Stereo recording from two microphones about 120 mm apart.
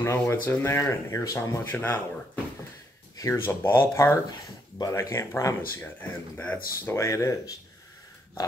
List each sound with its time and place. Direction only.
0.0 s speech: 20° left (ahead or behind)
3.2 s speech: 20° left (ahead or behind)